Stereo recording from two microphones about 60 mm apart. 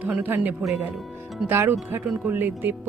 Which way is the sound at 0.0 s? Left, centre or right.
Right.